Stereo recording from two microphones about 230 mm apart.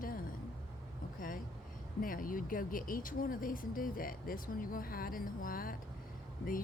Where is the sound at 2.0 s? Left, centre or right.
Left.